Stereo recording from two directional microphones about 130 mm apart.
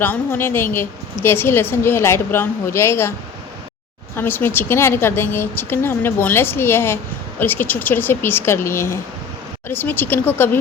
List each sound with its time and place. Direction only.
0.0 s a woman's voice: 15° left (ahead or behind)